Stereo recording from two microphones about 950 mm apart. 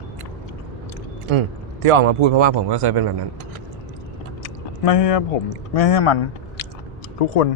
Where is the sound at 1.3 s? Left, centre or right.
Right.